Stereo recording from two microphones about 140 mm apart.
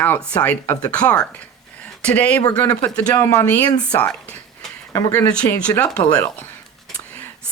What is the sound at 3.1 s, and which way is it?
Speech, 25° left (ahead or behind).